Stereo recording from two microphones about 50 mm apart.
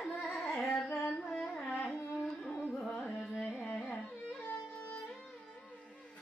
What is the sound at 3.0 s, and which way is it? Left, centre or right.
Carnatic music, centre.